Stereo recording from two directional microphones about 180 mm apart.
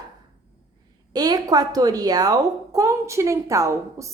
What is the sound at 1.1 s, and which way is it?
A woman's voice, 20° right (ahead or behind).